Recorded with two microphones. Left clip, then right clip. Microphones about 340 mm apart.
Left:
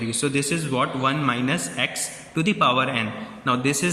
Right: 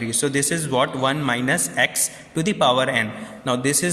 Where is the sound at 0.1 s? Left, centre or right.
Centre.